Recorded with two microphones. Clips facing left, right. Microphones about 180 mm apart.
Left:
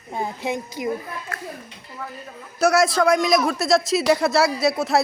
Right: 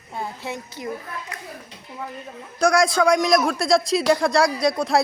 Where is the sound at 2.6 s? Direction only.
5° left (ahead or behind).